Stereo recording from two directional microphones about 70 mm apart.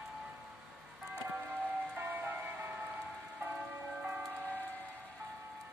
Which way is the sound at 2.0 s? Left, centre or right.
Right.